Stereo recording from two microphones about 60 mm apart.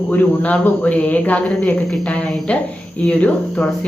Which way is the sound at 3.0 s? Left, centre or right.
Centre.